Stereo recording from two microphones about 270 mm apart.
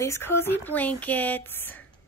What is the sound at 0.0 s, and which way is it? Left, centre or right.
A woman's voice, centre.